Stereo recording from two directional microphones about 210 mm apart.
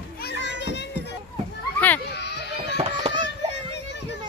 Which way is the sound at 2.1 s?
55° left (ahead or behind).